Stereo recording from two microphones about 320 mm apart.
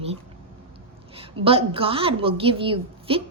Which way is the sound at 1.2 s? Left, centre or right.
Centre.